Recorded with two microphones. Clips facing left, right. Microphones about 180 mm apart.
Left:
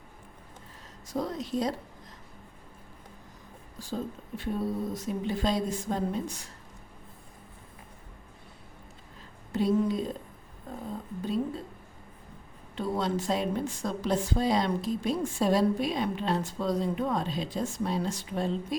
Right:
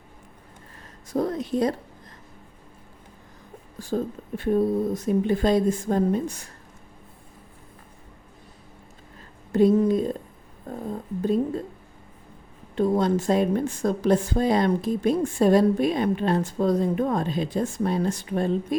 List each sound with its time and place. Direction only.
1.1 s a woman's voice: 55° right (ahead or behind)
3.8 s a woman's voice: 55° right (ahead or behind)
9.5 s a woman's voice: 50° right (ahead or behind)
11.2 s a woman's voice: 50° right (ahead or behind)
12.7 s a woman's voice: 50° right (ahead or behind)